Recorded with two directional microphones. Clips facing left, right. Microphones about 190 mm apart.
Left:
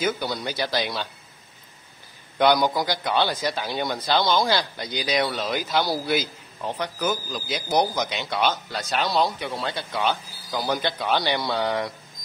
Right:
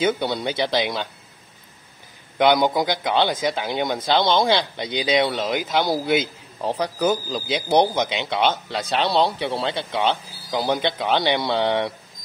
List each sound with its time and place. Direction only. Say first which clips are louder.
0.0 s a man's voice: right 4 dB; 25° right (ahead or behind)
2.3 s a man's voice: right 2 dB; 20° right (ahead or behind)
6.6 s a man's voice: right 5 dB; 35° right (ahead or behind)